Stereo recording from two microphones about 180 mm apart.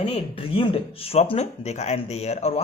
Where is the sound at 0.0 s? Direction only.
30° left (ahead or behind).